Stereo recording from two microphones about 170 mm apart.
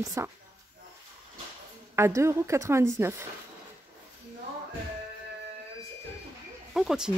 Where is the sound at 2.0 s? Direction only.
15° right (ahead or behind).